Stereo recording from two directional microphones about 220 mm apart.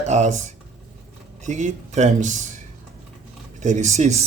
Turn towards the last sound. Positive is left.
turn(degrees=-30)  # may be behind; listen again after turning